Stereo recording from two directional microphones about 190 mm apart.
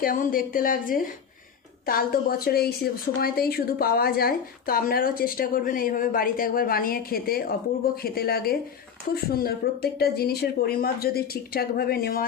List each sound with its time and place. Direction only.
0.0 s a woman's voice: 50° left (ahead or behind)